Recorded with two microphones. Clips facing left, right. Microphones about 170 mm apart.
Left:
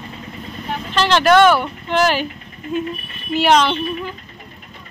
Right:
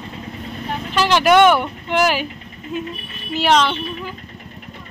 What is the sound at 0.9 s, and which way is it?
Speech, 10° right (ahead or behind).